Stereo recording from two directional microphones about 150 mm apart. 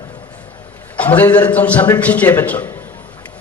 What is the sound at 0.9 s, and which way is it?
Speech, 10° left (ahead or behind).